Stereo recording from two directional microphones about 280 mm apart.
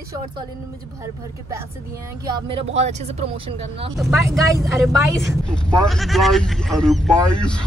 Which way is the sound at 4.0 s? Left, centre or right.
Centre.